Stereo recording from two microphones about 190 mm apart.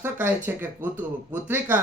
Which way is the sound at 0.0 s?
10° right (ahead or behind).